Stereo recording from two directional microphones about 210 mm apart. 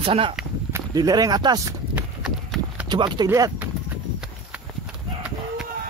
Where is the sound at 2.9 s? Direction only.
20° right (ahead or behind).